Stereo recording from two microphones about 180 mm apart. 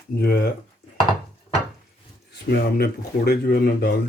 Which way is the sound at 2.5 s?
60° left (ahead or behind).